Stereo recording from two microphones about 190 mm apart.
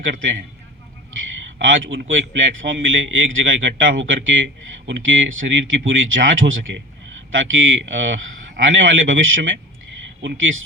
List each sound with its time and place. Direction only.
0.0 s a man's voice: 75° right (ahead or behind)
1.5 s a man's voice: 85° right
4.9 s a man's voice: 80° right